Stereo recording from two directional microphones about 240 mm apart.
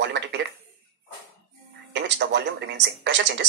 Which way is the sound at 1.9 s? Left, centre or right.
Right.